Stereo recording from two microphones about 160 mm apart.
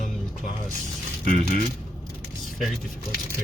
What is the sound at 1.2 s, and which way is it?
Speech, 65° left (ahead or behind).